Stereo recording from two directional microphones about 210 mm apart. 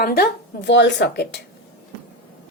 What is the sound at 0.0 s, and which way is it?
A woman's voice, 45° left (ahead or behind).